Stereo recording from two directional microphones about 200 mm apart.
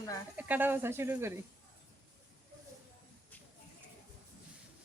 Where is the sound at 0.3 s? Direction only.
10° right (ahead or behind).